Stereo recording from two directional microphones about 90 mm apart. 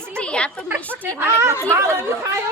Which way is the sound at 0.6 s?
20° right (ahead or behind).